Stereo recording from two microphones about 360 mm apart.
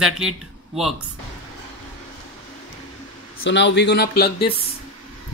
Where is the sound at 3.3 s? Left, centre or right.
Left.